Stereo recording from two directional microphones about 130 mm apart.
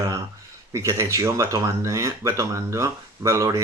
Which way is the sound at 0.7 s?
20° right (ahead or behind).